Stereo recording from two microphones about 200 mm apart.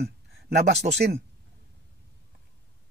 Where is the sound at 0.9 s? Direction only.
45° right (ahead or behind).